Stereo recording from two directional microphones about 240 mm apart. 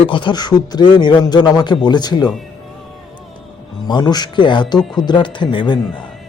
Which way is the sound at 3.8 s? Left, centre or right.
Centre.